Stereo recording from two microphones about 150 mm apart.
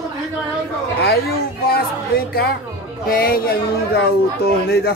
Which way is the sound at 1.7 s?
90° left.